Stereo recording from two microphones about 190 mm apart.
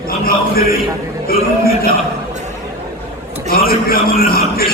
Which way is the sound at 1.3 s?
50° left (ahead or behind).